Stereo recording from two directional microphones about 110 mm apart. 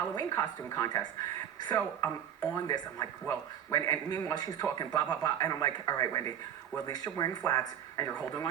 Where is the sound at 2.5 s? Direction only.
35° left (ahead or behind).